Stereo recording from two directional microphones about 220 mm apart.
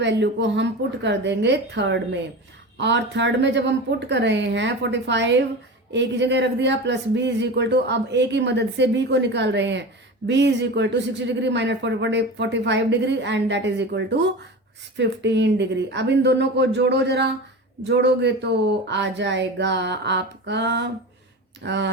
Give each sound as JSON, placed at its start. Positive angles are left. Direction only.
{"t": 0.0, "sound": "speech", "side_deg": -50}